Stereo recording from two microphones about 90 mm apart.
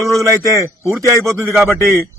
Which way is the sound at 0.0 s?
35° right (ahead or behind).